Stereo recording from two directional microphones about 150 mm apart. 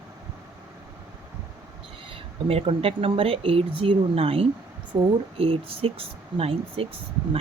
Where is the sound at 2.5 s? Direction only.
40° right (ahead or behind).